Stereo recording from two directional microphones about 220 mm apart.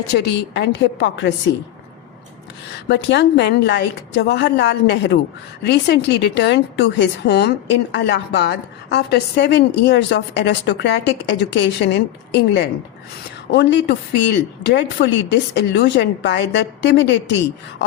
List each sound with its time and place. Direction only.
0.1 s a woman's voice: 50° left (ahead or behind)
2.7 s a woman's voice: 50° left (ahead or behind)